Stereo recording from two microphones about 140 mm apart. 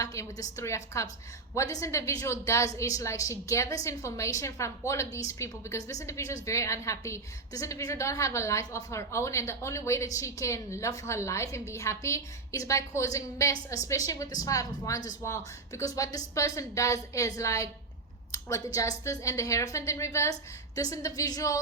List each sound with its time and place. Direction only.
0.0 s a woman's voice: 25° left (ahead or behind)